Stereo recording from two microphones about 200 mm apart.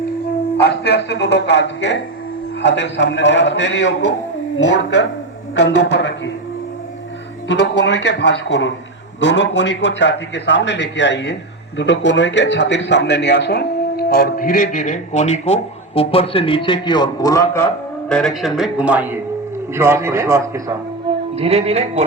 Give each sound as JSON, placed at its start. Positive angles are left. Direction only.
{"t": 0.6, "sound": "a man's voice", "side_deg": 55}
{"t": 5.5, "sound": "a man's voice", "side_deg": 65}
{"t": 7.4, "sound": "a man's voice", "side_deg": 60}
{"t": 18.1, "sound": "a man's voice", "side_deg": 0}
{"t": 21.3, "sound": "speech", "side_deg": -30}